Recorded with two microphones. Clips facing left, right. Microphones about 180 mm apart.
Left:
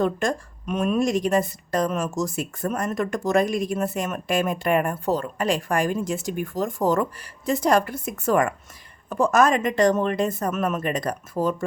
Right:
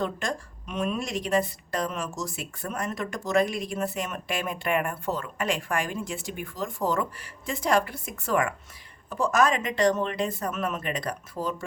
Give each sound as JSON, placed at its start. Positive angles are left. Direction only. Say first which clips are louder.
{"t": 0.0, "sound": "a woman's voice", "louder": "left 7 dB", "side_deg": 50}